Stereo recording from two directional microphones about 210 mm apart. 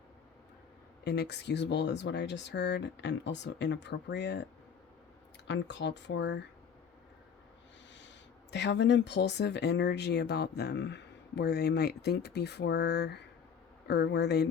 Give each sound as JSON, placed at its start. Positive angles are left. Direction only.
{"t": 1.0, "sound": "speech", "side_deg": 50}
{"t": 5.5, "sound": "speech", "side_deg": 55}
{"t": 7.9, "sound": "speech", "side_deg": 55}